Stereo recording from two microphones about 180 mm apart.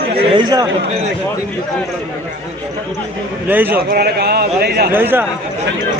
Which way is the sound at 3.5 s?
10° right (ahead or behind).